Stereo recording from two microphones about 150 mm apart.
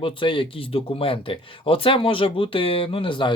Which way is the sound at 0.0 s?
35° left (ahead or behind).